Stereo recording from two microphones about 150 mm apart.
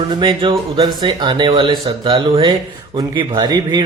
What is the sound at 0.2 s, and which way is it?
Speech, 30° right (ahead or behind).